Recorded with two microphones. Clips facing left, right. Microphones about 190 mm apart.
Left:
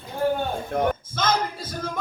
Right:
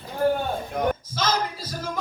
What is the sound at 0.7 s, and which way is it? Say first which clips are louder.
A woman's voice: left 3 dB; 50° left (ahead or behind).